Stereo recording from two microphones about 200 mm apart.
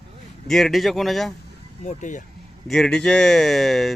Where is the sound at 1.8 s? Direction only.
40° left (ahead or behind).